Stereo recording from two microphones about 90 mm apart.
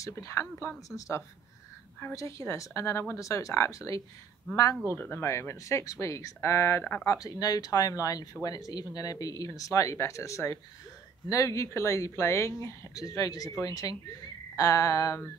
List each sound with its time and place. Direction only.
0.0 s speech: 35° left (ahead or behind)
4.9 s speech: 20° left (ahead or behind)
6.8 s speech: 10° left (ahead or behind)
7.1 s speech: 40° left (ahead or behind)